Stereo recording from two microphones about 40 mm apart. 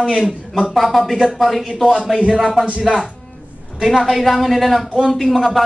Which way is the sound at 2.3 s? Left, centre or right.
Centre.